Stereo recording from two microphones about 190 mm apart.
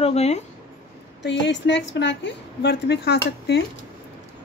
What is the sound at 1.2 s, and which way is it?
A woman's voice, 65° left (ahead or behind).